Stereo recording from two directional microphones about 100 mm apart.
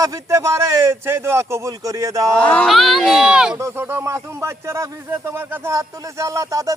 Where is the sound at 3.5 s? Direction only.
25° right (ahead or behind).